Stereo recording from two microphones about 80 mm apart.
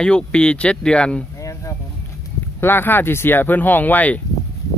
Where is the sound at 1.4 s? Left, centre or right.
Left.